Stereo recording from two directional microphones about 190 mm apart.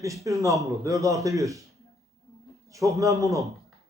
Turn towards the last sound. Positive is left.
turn(degrees=-15)  # may be behind; listen again after turning